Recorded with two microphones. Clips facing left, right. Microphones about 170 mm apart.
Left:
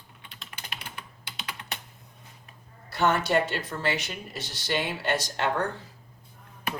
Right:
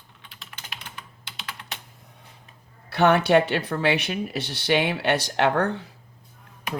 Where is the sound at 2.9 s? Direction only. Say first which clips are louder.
Right 6 dB; 65° right (ahead or behind).